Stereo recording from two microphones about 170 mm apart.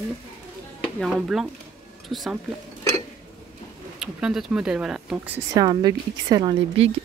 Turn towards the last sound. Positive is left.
turn(degrees=-30)  # may be behind; listen again after turning